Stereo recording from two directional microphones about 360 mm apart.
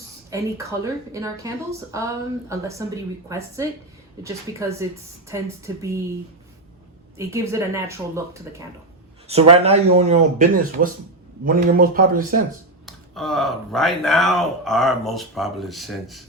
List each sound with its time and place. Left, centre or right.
0.3 s speech: centre
7.2 s a man's voice: centre; by 12.4 s right
12.8 s speech: centre